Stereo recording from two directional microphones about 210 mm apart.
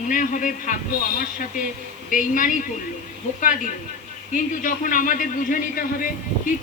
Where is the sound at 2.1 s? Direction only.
40° left (ahead or behind).